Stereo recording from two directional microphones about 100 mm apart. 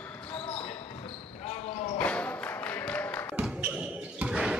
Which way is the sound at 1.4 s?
90° left.